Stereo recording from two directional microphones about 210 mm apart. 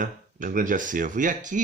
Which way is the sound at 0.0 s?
40° right (ahead or behind).